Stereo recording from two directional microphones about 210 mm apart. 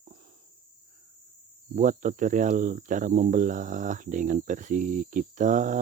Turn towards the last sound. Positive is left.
turn(degrees=-35)  # may be behind; listen again after turning